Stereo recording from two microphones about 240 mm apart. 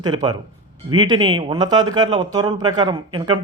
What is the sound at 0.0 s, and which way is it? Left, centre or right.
Speech, centre.